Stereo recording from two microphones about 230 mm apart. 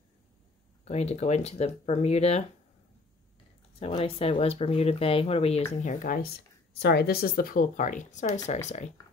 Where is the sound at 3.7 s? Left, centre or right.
Left.